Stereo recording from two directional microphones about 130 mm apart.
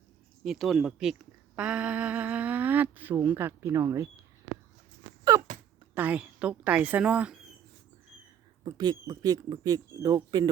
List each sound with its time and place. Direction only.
0.4 s speech: centre (ahead or behind); by 4.1 s 25° right (ahead or behind)
5.3 s speech: 25° right (ahead or behind)
5.9 s speech: 10° right (ahead or behind)
8.6 s speech: 35° right (ahead or behind)